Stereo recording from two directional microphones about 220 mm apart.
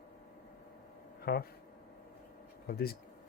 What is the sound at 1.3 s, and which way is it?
Speech, 45° left (ahead or behind).